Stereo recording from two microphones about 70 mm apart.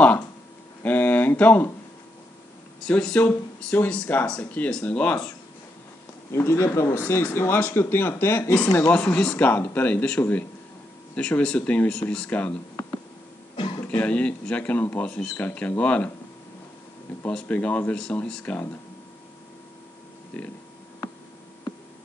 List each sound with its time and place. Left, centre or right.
0.8 s speech: left
2.9 s speech: centre
3.2 s speech: left
6.3 s speech: left
8.7 s speech: left
9.4 s speech: left
13.8 s speech: centre
17.3 s speech: centre